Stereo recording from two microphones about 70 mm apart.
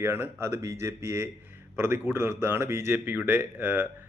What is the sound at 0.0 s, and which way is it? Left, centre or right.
A man's voice, right.